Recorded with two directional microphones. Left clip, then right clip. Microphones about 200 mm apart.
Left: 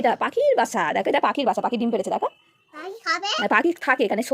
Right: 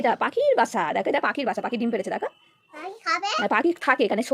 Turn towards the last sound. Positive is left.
turn(degrees=0)  # may be behind; listen again after turning